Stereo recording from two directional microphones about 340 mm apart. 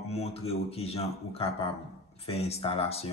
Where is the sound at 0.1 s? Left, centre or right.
Centre.